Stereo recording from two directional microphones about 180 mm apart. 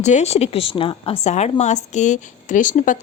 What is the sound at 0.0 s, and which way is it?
A woman's voice, 40° left (ahead or behind).